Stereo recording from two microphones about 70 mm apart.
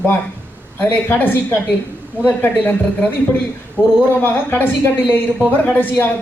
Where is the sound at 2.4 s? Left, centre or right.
Left.